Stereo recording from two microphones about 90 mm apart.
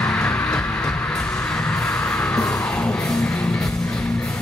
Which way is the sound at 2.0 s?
15° left (ahead or behind).